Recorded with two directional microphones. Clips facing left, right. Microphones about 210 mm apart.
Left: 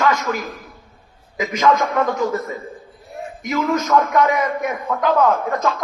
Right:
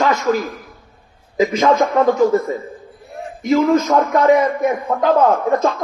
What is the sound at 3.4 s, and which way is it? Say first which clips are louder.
A man's voice: right 7 dB; 30° right (ahead or behind).